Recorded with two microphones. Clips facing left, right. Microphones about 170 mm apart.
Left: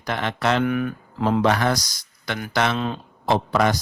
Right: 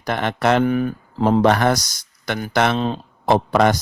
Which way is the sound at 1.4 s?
55° right (ahead or behind).